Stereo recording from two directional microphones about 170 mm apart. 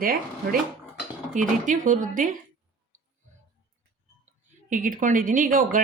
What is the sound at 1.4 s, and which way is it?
Speech, 50° right (ahead or behind).